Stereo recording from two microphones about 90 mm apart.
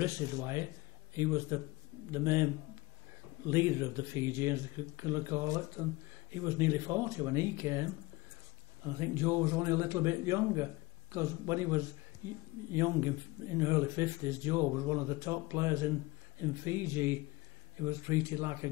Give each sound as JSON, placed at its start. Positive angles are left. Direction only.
{"t": 0.0, "sound": "a man's voice", "side_deg": -35}
{"t": 5.5, "sound": "a man's voice", "side_deg": -40}